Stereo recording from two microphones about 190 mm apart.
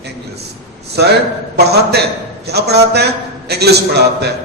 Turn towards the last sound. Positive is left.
turn(degrees=-60)  # may be behind; listen again after turning